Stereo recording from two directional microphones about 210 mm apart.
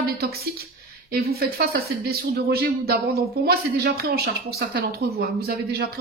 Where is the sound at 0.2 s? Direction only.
45° right (ahead or behind).